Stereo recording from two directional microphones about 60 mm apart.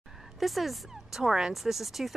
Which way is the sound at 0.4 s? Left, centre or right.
Centre.